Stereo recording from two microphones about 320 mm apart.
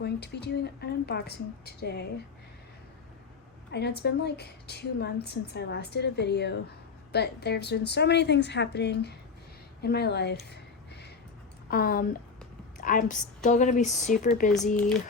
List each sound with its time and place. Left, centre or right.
0.0 s a woman's voice: left
3.7 s a woman's voice: left
9.8 s a sound: left
11.7 s a woman's voice: left